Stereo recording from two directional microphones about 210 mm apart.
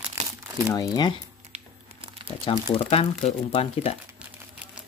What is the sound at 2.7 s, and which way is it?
Speech, 25° left (ahead or behind).